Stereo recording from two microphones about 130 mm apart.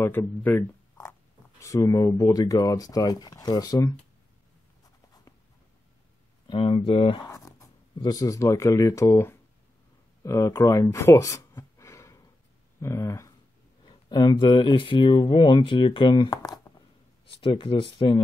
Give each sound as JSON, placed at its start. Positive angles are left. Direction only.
{"t": 0.0, "sound": "speech", "side_deg": 15}
{"t": 1.6, "sound": "speech", "side_deg": 25}
{"t": 6.4, "sound": "speech", "side_deg": 40}
{"t": 7.2, "sound": "speech", "side_deg": 25}
{"t": 13.8, "sound": "speech", "side_deg": 35}